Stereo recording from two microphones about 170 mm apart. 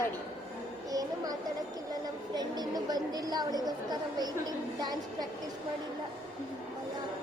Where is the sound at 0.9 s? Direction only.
20° right (ahead or behind).